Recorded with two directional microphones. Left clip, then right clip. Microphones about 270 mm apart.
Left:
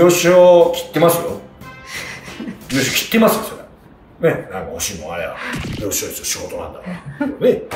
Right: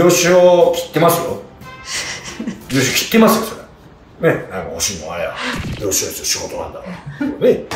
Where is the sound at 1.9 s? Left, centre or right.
Centre.